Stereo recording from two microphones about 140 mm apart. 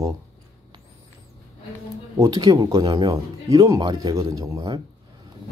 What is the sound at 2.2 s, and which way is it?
Speech, 30° right (ahead or behind).